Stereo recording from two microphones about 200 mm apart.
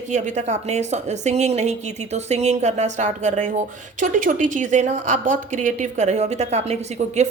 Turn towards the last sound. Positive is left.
turn(degrees=-35)  # may be behind; listen again after turning